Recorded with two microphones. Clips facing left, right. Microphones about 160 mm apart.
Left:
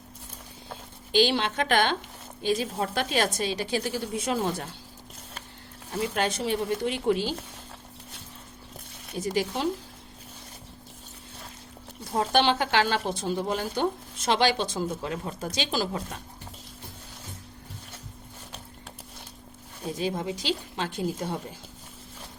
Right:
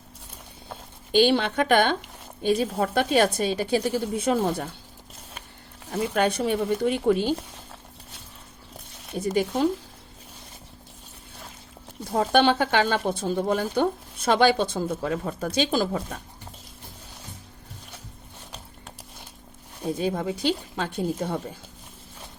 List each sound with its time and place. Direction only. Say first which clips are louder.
1.1 s a woman's voice: right 4 dB; 55° right (ahead or behind)
6.2 s speech: right 4 dB; 55° right (ahead or behind)
9.2 s speech: right 4 dB; 50° right (ahead or behind)
12.1 s a woman's voice: right 3 dB; 55° right (ahead or behind)
20.0 s speech: right 3 dB; 50° right (ahead or behind)